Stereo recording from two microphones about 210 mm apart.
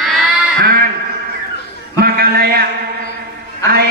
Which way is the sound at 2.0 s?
45° right (ahead or behind).